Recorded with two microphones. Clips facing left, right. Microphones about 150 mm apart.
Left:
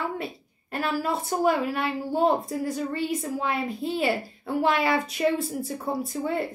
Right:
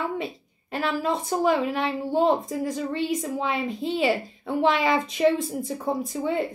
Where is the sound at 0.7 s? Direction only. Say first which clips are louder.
Right 1 dB; 5° left (ahead or behind).